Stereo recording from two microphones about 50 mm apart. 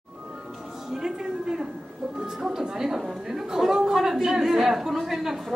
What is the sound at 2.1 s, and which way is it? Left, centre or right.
A woman's voice, centre.